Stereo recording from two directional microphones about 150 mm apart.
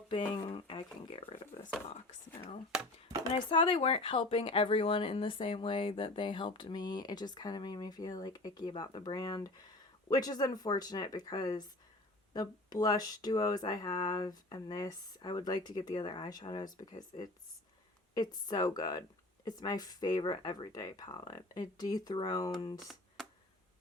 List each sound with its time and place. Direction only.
0.4 s speech: 35° left (ahead or behind)
3.3 s speech: 35° left (ahead or behind)
22.8 s a sound: centre (ahead or behind)